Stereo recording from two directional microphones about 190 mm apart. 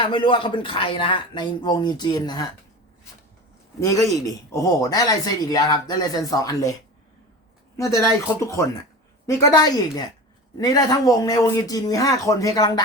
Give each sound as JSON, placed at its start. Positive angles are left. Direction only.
{"t": 0.0, "sound": "speech", "side_deg": 25}
{"t": 3.8, "sound": "speech", "side_deg": 15}
{"t": 7.8, "sound": "speech", "side_deg": 15}